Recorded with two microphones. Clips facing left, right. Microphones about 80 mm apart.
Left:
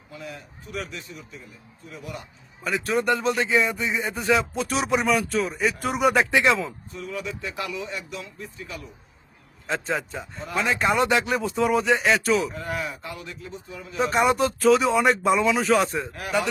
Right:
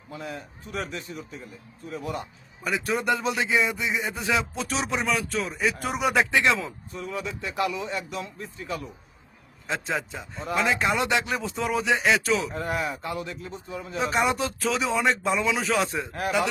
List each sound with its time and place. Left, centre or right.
0.1 s speech: right
2.6 s speech: centre
6.9 s speech: right
9.6 s speech: centre
12.5 s speech: right
14.0 s speech: centre